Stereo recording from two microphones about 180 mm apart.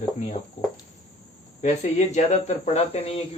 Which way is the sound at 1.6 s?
40° left (ahead or behind).